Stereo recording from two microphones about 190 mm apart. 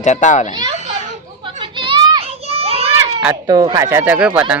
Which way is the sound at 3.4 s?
20° right (ahead or behind).